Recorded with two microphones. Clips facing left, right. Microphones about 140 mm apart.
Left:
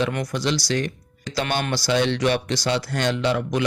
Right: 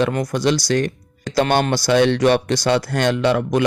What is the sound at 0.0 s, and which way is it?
Speech, 50° right (ahead or behind).